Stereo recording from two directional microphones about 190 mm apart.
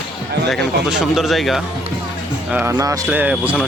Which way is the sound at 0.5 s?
Centre (ahead or behind).